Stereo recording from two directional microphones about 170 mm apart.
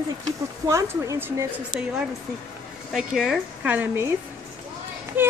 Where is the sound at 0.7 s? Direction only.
15° right (ahead or behind).